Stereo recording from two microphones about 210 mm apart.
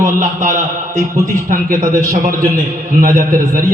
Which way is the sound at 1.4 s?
40° right (ahead or behind).